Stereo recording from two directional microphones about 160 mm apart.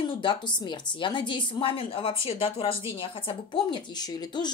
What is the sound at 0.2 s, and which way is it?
A woman's voice, 30° left (ahead or behind).